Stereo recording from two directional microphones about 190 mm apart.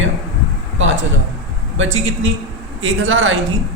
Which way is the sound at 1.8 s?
90° right.